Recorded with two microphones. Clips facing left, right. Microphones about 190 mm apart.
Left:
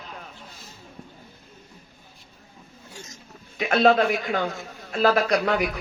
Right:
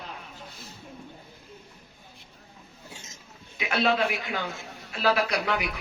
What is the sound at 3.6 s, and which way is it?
A man's voice, 45° left (ahead or behind).